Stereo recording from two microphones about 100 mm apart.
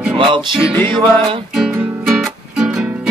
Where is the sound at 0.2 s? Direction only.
55° right (ahead or behind).